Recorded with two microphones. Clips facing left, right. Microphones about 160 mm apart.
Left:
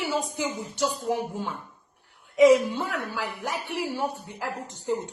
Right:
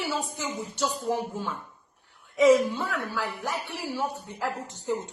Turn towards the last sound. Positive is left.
turn(degrees=10)  # may be behind; listen again after turning